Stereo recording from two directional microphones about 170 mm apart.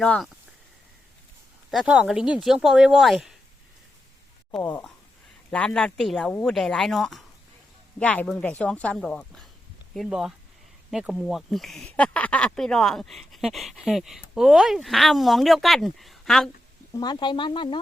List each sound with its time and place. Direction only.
0.0 s speech: 5° left (ahead or behind)
1.7 s speech: 5° right (ahead or behind)
4.5 s speech: 5° left (ahead or behind)
17.0 s speech: 25° left (ahead or behind)